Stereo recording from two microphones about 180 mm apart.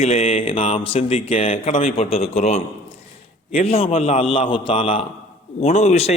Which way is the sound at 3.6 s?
35° left (ahead or behind).